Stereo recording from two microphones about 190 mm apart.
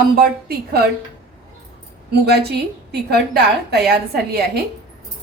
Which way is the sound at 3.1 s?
60° right (ahead or behind).